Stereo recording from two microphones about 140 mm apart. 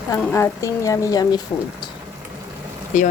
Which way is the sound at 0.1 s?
20° left (ahead or behind).